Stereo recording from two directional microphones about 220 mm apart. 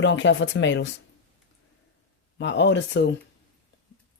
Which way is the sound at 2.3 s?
55° left (ahead or behind).